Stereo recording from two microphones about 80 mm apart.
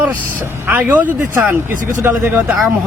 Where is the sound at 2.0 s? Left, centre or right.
Right.